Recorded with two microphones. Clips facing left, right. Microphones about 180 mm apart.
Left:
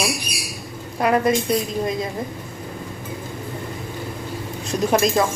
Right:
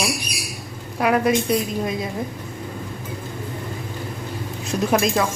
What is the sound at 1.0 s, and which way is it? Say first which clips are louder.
A woman's voice: even; 5° right (ahead or behind).